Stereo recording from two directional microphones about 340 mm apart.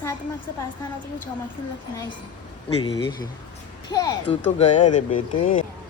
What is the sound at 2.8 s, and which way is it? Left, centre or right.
Speech, centre.